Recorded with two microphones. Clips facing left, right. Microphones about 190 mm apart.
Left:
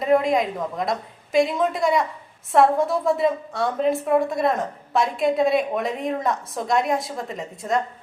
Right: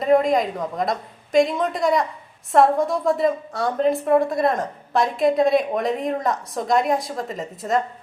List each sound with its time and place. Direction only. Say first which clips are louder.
0.0 s a woman's voice: right 2 dB; centre (ahead or behind)